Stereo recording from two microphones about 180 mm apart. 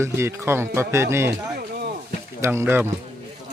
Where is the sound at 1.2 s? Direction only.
60° right (ahead or behind).